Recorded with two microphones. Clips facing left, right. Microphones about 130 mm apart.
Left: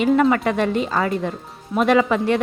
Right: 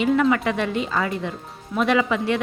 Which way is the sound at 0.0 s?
45° left (ahead or behind).